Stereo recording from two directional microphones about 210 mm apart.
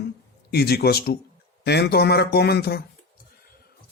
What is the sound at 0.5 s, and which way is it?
A man's voice, 50° left (ahead or behind).